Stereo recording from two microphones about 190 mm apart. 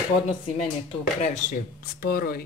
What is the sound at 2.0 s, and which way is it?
Speech, 50° left (ahead or behind).